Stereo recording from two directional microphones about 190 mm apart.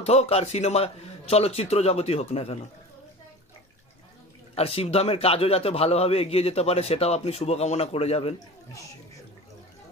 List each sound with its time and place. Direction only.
0.0 s a man's voice: 35° left (ahead or behind)
4.6 s a man's voice: 30° left (ahead or behind)